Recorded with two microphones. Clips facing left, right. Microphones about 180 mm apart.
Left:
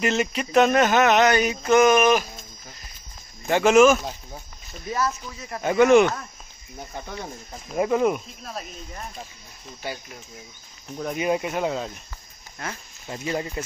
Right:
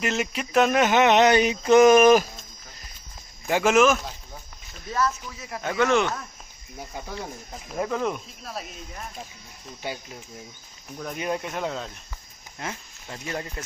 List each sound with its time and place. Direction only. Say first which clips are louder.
0.0 s speech: left 3 dB; centre (ahead or behind)
1.0 s speech: right 1 dB; 30° right (ahead or behind)
1.8 s speech: right 3 dB; 40° right (ahead or behind)
3.4 s speech: left 4 dB; 5° right (ahead or behind); by 6.1 s 10° left (ahead or behind)
6.9 s speech: left 1 dB; 5° right (ahead or behind)
7.7 s speech: left 6 dB; 10° left (ahead or behind)
8.5 s speech: even; centre (ahead or behind)
11.0 s speech: left 5 dB; 10° left (ahead or behind)
13.1 s speech: left 5 dB; 10° left (ahead or behind)